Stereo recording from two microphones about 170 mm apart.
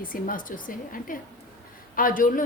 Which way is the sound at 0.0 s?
55° left (ahead or behind).